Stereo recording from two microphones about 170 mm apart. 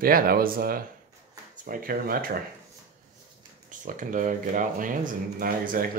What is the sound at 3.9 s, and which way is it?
Speech, 50° right (ahead or behind).